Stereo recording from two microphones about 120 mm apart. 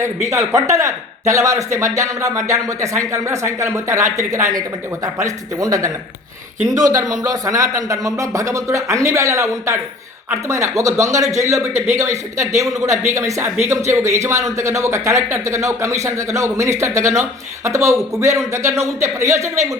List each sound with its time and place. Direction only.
0.3 s speech: 25° right (ahead or behind)